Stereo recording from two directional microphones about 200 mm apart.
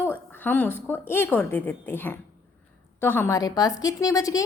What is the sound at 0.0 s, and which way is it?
A woman's voice, 10° left (ahead or behind).